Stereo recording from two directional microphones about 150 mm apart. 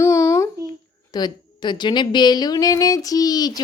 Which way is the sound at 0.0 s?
20° left (ahead or behind).